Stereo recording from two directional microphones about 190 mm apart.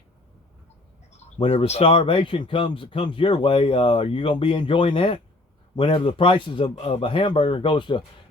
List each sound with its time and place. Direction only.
1.5 s speech: 35° left (ahead or behind)